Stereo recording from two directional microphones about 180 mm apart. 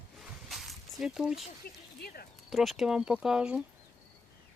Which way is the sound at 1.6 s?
60° left (ahead or behind).